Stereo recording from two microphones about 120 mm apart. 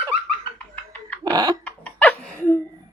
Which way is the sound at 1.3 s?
35° right (ahead or behind).